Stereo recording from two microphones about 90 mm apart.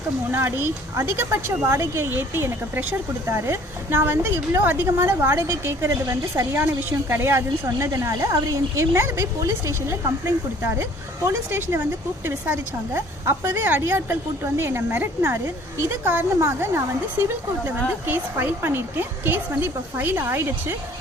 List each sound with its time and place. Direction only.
0.3 s a woman's voice: 25° right (ahead or behind)